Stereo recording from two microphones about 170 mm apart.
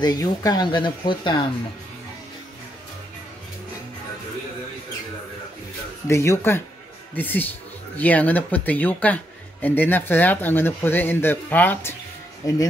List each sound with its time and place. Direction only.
0.0 s speech: 20° left (ahead or behind)
6.0 s speech: 15° left (ahead or behind)